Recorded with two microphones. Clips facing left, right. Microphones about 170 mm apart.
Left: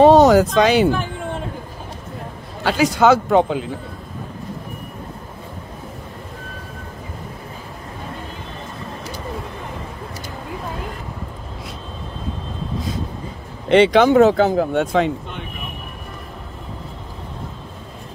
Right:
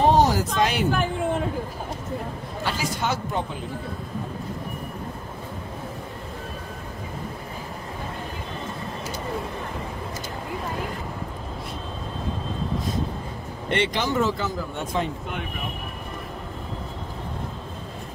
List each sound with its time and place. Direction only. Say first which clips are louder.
0.0 s speech: left 9 dB; 80° left
2.6 s speech: left 12 dB; 90° left
13.7 s speech: left 12 dB; 80° left